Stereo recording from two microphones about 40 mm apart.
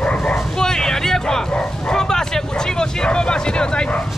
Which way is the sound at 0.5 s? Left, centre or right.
Centre.